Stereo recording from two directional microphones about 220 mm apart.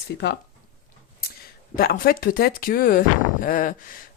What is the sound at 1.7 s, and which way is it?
Speech, 40° left (ahead or behind).